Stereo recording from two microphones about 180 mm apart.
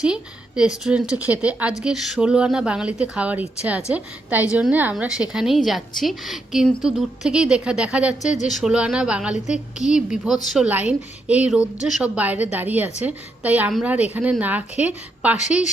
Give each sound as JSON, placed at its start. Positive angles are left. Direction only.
{"t": 0.0, "sound": "a woman's voice", "side_deg": -5}
{"t": 15.4, "sound": "speech", "side_deg": 40}